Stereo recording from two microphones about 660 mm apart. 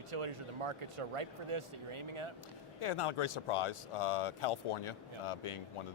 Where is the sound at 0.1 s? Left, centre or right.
Right.